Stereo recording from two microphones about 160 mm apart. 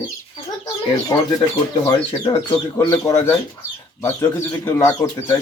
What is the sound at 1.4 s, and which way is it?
Speech, 25° left (ahead or behind).